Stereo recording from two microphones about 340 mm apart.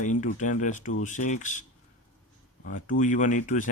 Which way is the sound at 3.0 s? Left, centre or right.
Left.